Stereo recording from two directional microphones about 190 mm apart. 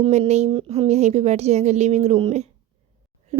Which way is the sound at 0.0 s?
35° right (ahead or behind).